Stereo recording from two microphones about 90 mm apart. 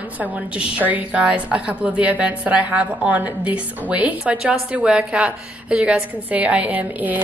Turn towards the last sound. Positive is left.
turn(degrees=-20)  # may be behind; listen again after turning